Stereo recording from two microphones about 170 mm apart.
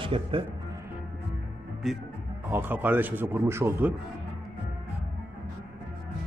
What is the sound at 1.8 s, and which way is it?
Speech, centre (ahead or behind).